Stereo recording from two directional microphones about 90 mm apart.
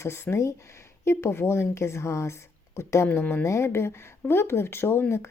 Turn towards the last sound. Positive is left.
turn(degrees=25)  # may be behind; listen again after turning